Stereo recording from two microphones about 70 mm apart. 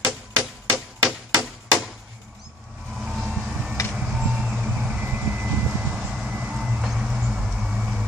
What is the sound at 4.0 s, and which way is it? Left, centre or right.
Music, centre.